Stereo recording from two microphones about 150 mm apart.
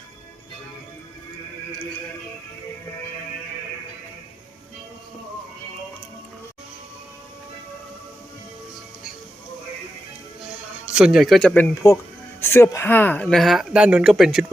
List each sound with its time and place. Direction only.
10.8 s a man's voice: 5° right (ahead or behind)
11.7 s speech: 20° left (ahead or behind); by 14.4 s centre (ahead or behind)